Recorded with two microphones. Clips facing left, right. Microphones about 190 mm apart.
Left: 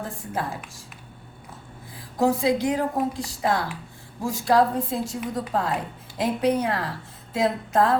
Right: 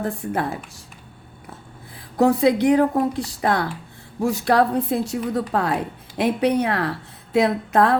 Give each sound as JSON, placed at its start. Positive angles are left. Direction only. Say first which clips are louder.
{"t": 0.0, "sound": "speech", "louder": "right 6 dB", "side_deg": -60}
{"t": 2.1, "sound": "a woman's voice", "louder": "right 5 dB", "side_deg": -65}